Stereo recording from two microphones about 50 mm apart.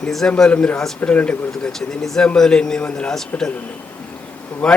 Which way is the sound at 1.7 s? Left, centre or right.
Centre.